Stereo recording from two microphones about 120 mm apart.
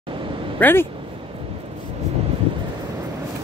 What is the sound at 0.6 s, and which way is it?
Speech, 15° left (ahead or behind).